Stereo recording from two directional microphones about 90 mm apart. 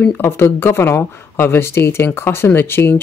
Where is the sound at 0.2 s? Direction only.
25° left (ahead or behind).